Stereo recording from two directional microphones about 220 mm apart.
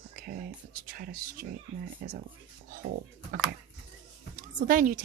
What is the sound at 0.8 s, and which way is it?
Speech, 40° right (ahead or behind).